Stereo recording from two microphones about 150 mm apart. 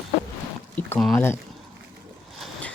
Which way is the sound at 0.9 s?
Centre (ahead or behind).